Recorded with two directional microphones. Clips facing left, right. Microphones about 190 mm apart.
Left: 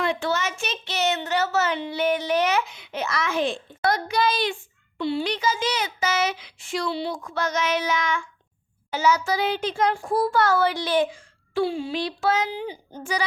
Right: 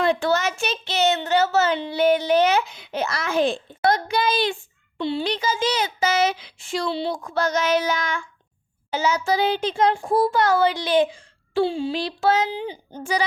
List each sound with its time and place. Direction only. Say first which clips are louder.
0.0 s a child's voice: right 4 dB; 35° right (ahead or behind)
8.9 s a child's voice: even; 25° right (ahead or behind)